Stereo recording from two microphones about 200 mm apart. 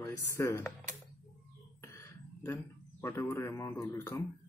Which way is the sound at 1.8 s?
15° left (ahead or behind).